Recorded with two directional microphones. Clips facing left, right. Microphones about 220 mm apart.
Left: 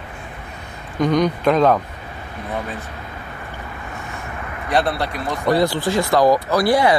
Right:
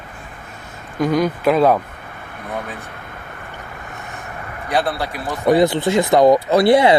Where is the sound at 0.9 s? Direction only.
5° right (ahead or behind).